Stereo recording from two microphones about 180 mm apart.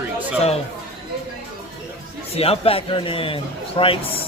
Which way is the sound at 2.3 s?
35° left (ahead or behind).